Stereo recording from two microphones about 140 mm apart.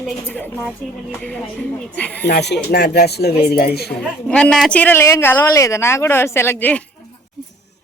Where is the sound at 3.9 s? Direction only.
5° left (ahead or behind).